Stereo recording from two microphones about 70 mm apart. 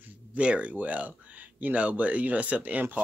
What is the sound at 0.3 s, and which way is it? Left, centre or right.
Speech, centre.